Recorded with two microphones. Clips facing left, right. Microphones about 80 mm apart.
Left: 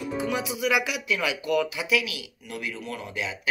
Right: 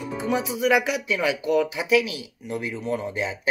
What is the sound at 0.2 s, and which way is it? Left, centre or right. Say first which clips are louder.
A man's voice: right 5 dB; right.